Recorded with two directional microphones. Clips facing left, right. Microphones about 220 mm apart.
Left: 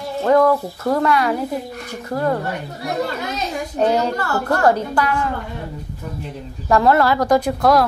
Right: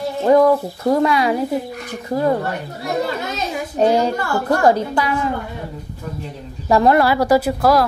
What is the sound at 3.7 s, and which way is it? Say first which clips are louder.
A woman's voice: right 2 dB; 10° right (ahead or behind).